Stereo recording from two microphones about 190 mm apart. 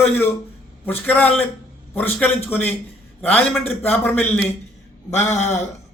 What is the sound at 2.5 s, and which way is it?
A man's voice, 10° left (ahead or behind).